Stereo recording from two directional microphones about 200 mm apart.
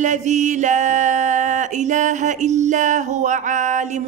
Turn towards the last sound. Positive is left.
turn(degrees=-40)  # may be behind; listen again after turning